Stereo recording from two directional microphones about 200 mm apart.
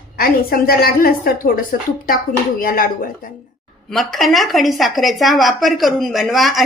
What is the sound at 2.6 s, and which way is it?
Speech, 45° left (ahead or behind).